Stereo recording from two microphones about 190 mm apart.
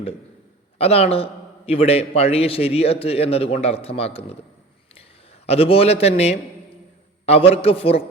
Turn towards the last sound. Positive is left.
turn(degrees=30)  # may be behind; listen again after turning